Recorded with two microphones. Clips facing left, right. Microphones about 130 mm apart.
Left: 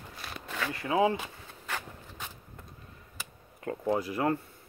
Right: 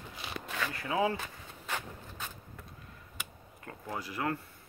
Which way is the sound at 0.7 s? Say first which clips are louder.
Left 5 dB; 25° left (ahead or behind).